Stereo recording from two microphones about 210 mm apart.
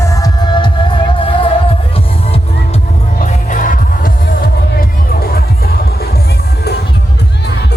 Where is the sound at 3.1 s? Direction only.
40° left (ahead or behind).